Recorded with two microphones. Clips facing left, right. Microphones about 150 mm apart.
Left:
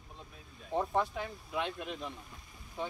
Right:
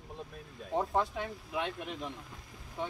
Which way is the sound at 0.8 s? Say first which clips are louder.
Even; 10° right (ahead or behind).